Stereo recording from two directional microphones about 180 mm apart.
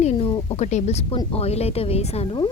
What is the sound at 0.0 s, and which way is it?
A woman's voice, 30° left (ahead or behind).